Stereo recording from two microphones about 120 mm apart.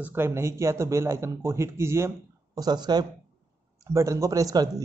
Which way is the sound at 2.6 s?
35° right (ahead or behind).